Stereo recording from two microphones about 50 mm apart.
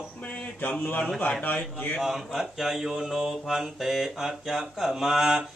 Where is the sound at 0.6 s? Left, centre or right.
Left.